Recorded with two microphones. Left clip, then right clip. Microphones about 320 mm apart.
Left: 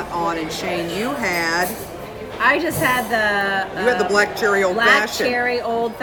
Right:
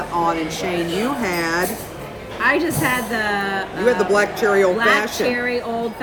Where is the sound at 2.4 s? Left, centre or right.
Centre.